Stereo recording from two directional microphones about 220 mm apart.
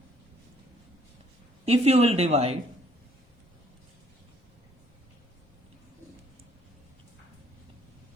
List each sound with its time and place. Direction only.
1.6 s speech: 30° right (ahead or behind)